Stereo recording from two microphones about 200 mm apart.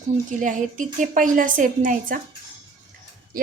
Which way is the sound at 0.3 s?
40° right (ahead or behind).